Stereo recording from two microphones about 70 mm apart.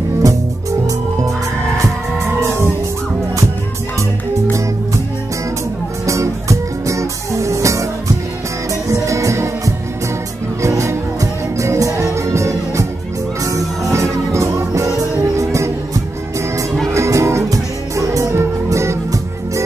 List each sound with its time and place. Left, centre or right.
0.2 s music: right
4.5 s music: right
6.0 s music: right
8.9 s music: right